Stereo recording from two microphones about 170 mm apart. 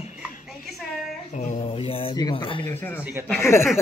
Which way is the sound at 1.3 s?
45° left (ahead or behind).